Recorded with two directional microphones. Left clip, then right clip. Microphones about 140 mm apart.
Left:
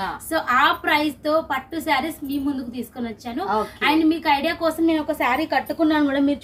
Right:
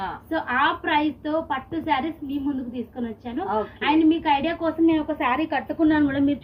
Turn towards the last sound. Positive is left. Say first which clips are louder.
# left 1 dB
turn(degrees=30)  # may be behind; listen again after turning